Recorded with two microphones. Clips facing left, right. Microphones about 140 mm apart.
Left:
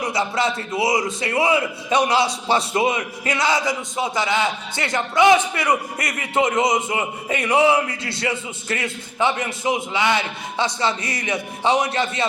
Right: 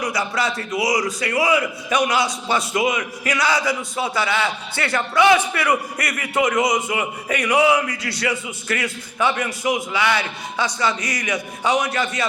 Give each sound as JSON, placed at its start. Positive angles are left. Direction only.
{"t": 0.0, "sound": "a man's voice", "side_deg": 25}